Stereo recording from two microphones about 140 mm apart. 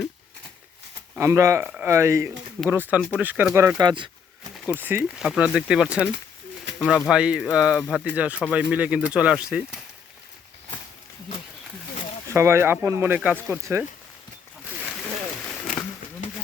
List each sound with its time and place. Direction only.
1.2 s speech: 20° right (ahead or behind)
3.8 s speech: 35° right (ahead or behind)
4.6 s speech: 15° right (ahead or behind)
12.3 s speech: 20° right (ahead or behind)
15.4 s a sound: 10° left (ahead or behind)